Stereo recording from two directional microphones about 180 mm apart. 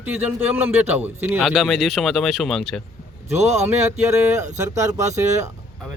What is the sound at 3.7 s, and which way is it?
Speech, 15° right (ahead or behind).